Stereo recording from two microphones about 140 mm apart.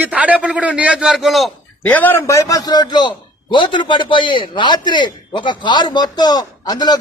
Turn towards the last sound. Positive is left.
turn(degrees=30)  # may be behind; listen again after turning